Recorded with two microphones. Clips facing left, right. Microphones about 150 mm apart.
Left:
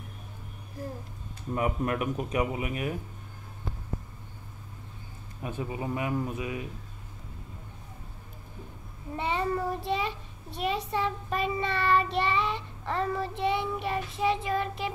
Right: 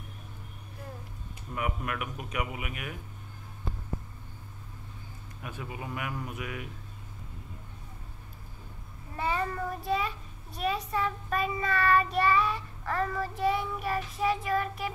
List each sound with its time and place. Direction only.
1.5 s speech: 35° left (ahead or behind)
5.4 s a child's voice: 30° left (ahead or behind)
9.1 s a child's voice: 25° left (ahead or behind)